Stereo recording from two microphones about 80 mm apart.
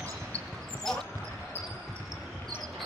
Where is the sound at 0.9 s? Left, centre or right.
Centre.